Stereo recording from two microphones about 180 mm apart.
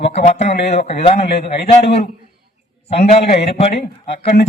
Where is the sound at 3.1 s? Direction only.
35° left (ahead or behind).